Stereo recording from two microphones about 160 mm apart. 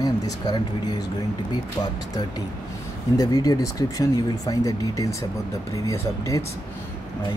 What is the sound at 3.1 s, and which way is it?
Speech, 25° left (ahead or behind).